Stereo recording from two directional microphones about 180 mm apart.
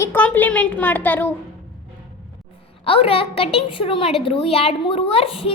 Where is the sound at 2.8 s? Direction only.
30° left (ahead or behind).